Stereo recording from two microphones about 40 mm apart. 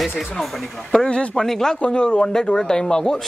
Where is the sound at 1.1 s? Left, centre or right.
Left.